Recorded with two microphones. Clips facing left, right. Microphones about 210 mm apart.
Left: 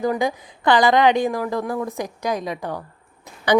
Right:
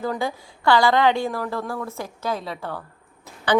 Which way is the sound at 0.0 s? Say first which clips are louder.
Left 4 dB; 15° left (ahead or behind).